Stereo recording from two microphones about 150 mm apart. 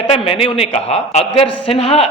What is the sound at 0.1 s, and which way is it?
A man's voice, 40° left (ahead or behind).